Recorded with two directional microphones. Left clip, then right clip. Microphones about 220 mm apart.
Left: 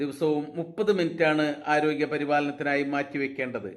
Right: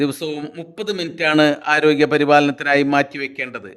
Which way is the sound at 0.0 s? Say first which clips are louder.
Right 4 dB; 55° right (ahead or behind).